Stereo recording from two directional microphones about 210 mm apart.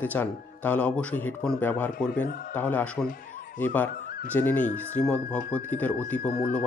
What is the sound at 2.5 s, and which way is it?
Speech, 10° left (ahead or behind).